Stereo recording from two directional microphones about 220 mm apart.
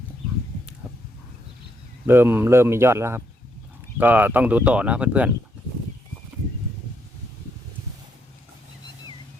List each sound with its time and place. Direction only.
2.0 s speech: 10° right (ahead or behind)